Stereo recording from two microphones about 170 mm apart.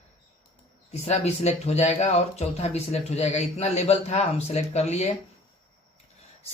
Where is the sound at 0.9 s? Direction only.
40° left (ahead or behind).